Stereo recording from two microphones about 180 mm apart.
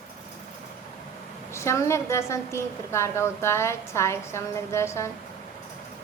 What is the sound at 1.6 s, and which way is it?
Speech, 15° left (ahead or behind).